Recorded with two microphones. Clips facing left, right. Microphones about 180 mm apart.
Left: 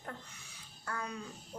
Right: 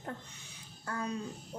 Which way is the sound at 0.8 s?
30° right (ahead or behind).